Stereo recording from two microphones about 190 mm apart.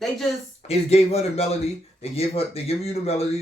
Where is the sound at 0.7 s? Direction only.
35° left (ahead or behind).